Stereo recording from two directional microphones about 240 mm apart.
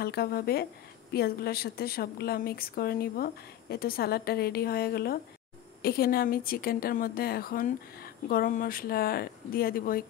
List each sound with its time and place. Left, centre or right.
0.0 s speech: left